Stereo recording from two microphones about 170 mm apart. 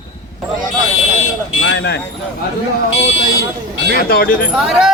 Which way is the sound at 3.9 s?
60° left (ahead or behind).